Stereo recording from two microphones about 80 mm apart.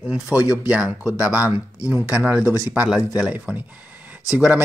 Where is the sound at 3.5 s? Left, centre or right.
Right.